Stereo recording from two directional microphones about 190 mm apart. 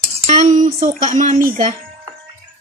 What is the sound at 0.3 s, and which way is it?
Speech, 40° right (ahead or behind).